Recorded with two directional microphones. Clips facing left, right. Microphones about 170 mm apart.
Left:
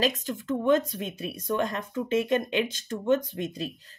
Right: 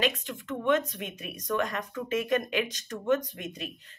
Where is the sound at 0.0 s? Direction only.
40° left (ahead or behind).